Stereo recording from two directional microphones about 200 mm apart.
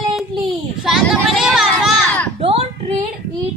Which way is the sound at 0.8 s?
Centre (ahead or behind).